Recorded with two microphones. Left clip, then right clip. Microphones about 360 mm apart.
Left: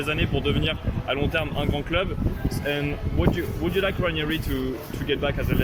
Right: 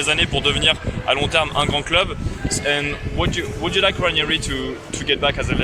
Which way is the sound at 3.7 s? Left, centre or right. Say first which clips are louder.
Right 8 dB; centre.